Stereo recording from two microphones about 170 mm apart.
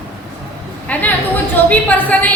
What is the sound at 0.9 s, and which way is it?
A woman's voice, 10° left (ahead or behind).